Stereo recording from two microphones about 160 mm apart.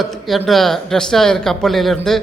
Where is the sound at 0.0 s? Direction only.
Centre (ahead or behind).